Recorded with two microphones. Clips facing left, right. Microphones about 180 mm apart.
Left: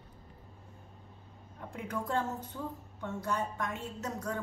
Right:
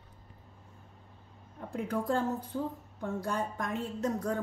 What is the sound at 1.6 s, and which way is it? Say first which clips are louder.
Speech: right 5 dB; 35° right (ahead or behind).